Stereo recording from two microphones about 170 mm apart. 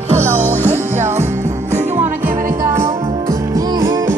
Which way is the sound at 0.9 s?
40° right (ahead or behind).